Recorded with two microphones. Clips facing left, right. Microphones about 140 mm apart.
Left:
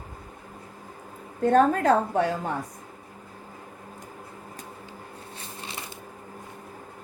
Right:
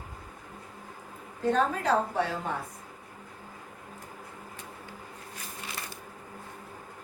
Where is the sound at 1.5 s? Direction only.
50° left (ahead or behind).